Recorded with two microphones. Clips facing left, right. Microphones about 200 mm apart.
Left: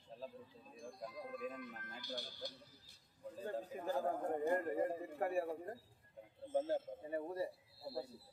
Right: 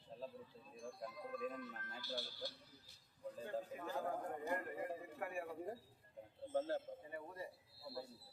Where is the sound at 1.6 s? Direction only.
15° left (ahead or behind).